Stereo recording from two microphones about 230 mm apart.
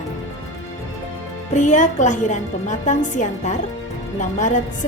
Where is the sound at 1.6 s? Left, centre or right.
Left.